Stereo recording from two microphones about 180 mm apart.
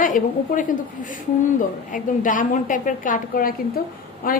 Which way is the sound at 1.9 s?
45° left (ahead or behind).